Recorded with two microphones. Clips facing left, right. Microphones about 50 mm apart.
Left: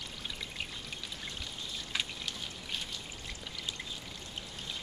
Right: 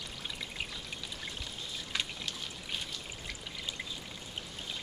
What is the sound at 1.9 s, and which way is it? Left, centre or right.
Water, centre.